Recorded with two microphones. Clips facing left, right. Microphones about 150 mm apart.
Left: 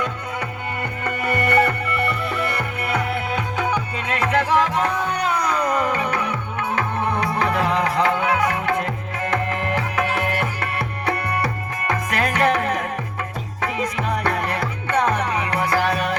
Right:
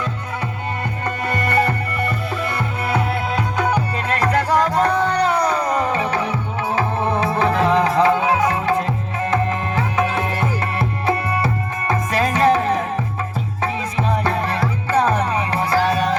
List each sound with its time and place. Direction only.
1.0 s music: 60° left (ahead or behind)
2.6 s music: 30° right (ahead or behind)
14.1 s music: 30° right (ahead or behind)